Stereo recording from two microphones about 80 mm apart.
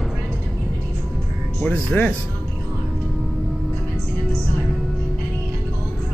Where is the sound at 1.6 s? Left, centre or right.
Centre.